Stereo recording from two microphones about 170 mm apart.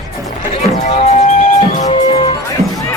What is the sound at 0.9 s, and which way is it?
Music, 40° left (ahead or behind).